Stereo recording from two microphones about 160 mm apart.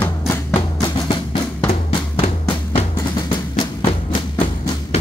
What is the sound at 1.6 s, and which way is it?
Drum, 35° left (ahead or behind).